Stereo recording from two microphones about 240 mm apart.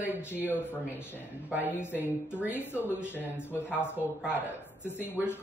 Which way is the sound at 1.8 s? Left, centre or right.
Centre.